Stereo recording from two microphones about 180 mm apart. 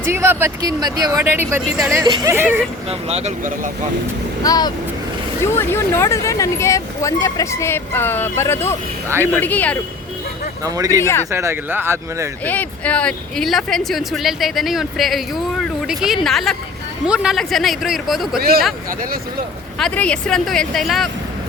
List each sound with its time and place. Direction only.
0.0 s speech: 15° right (ahead or behind)
1.2 s speech: 10° right (ahead or behind)
2.9 s speech: 35° right (ahead or behind)
4.4 s speech: 20° left (ahead or behind)
10.6 s speech: 20° right (ahead or behind)
10.8 s speech: 15° left (ahead or behind)
11.3 s speech: 15° right (ahead or behind)
12.5 s speech: 10° left (ahead or behind)
18.3 s speech: 55° right (ahead or behind)
19.8 s speech: 5° left (ahead or behind)